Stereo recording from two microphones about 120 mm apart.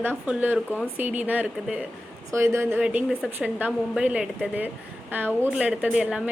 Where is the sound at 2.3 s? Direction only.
20° right (ahead or behind).